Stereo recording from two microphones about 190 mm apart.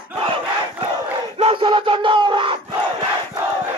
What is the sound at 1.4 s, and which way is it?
Battle cry, 30° right (ahead or behind).